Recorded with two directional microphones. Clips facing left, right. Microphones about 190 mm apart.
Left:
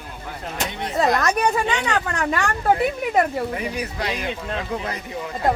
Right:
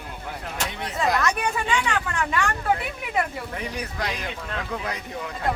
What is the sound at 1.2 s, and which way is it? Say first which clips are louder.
A woman's voice: left 5 dB; 40° left (ahead or behind).